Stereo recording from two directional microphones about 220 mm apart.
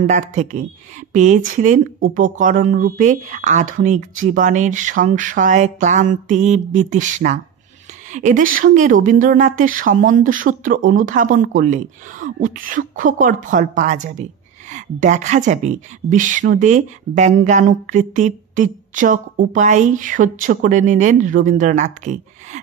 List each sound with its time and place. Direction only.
0.0 s a woman's voice: 35° right (ahead or behind)